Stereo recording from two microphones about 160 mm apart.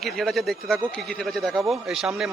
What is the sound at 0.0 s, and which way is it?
A man's voice, centre (ahead or behind).